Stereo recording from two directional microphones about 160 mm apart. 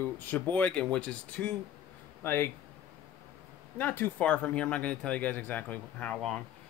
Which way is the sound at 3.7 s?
10° left (ahead or behind).